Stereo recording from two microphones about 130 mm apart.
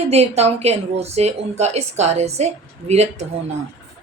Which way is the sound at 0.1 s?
55° right (ahead or behind).